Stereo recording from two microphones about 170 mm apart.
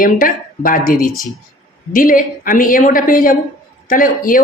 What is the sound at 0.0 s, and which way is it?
A woman's voice, 55° left (ahead or behind).